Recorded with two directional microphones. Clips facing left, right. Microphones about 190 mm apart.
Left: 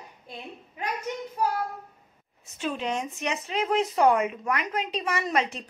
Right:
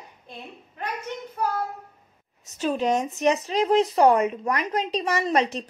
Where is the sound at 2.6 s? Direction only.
40° right (ahead or behind).